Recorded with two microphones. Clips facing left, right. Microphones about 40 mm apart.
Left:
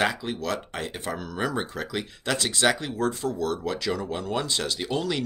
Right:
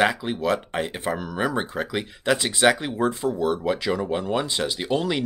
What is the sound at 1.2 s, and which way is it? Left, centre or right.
Speech, centre.